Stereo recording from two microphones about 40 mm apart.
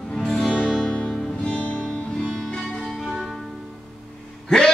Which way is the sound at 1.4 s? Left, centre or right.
Left.